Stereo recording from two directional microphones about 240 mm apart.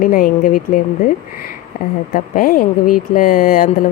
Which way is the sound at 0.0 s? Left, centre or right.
Left.